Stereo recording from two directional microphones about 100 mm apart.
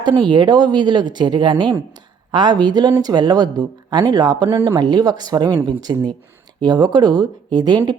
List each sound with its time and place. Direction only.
0.0 s speech: 50° right (ahead or behind)